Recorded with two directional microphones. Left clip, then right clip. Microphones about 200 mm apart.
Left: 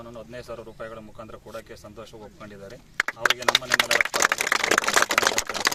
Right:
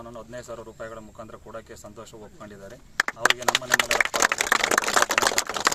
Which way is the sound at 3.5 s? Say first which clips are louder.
Left 1 dB; 60° right (ahead or behind).